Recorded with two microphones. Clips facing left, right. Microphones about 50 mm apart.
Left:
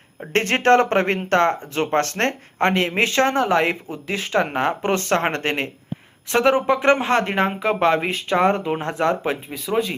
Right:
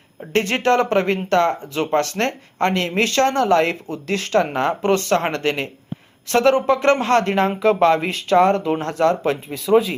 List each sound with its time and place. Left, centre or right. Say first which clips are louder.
0.3 s speech: left 1 dB; left
2.6 s speech: even; left
6.2 s speech: right 2 dB; centre
9.5 s speech: right 9 dB; centre